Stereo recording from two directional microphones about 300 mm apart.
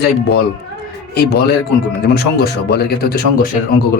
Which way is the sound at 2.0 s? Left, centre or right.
Left.